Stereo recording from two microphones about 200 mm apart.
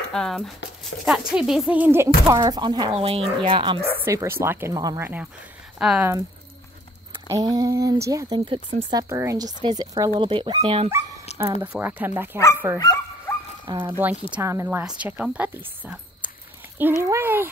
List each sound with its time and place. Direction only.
0.1 s speech: 5° left (ahead or behind)
0.9 s speech: 65° left (ahead or behind)
1.3 s speech: 5° right (ahead or behind); by 3.9 s 25° right (ahead or behind)
4.0 s speech: 15° right (ahead or behind)
7.2 s speech: 20° right (ahead or behind)
11.3 s dog: 35° left (ahead or behind)
11.6 s speech: 10° right (ahead or behind)
12.7 s speech: 15° left (ahead or behind)
13.7 s speech: 25° right (ahead or behind)
14.3 s speech: 15° right (ahead or behind)